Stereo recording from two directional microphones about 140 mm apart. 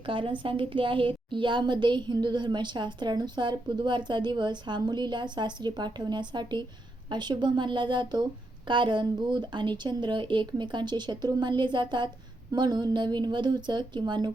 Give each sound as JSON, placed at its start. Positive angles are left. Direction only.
{"t": 0.0, "sound": "a woman's voice", "side_deg": -35}